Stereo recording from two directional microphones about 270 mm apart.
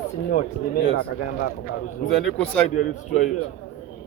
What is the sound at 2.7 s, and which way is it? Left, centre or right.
Speech, left.